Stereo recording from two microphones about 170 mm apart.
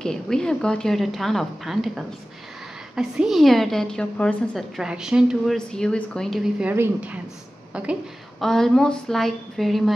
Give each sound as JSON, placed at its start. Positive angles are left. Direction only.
{"t": 0.0, "sound": "a woman's voice", "side_deg": 5}